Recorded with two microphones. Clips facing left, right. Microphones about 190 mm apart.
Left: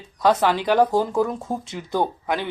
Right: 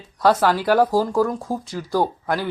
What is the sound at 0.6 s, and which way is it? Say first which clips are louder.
Speech: right 1 dB; 5° right (ahead or behind).